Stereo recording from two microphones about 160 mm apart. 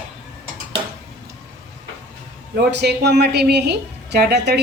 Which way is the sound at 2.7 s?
90° right.